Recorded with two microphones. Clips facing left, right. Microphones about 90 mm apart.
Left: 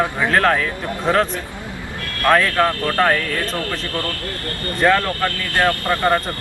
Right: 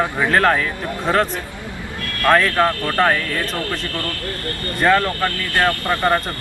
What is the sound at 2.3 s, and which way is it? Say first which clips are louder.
Speech: even; 5° right (ahead or behind).